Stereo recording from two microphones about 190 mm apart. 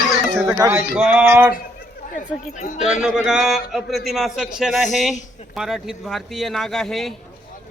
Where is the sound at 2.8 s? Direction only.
5° right (ahead or behind).